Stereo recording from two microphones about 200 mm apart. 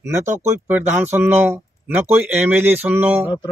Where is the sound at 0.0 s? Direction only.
15° right (ahead or behind).